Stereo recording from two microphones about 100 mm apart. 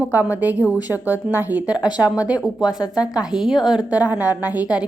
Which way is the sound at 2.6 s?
40° left (ahead or behind).